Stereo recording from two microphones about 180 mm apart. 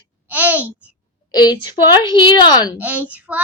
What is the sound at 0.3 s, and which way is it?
Babbling, 10° right (ahead or behind).